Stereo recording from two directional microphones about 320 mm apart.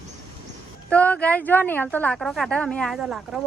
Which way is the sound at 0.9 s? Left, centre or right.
Centre.